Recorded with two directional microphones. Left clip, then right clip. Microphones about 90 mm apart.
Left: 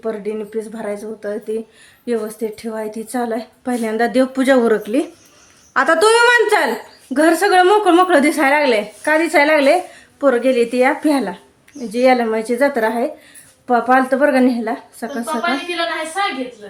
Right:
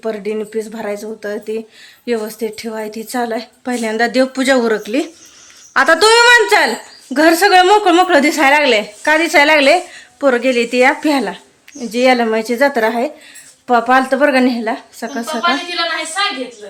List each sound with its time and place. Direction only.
0.0 s a woman's voice: 30° right (ahead or behind); by 4.1 s centre (ahead or behind)
4.1 s speech: 20° left (ahead or behind)
4.8 s speech: 5° left (ahead or behind)
5.7 s a woman's voice: 20° right (ahead or behind)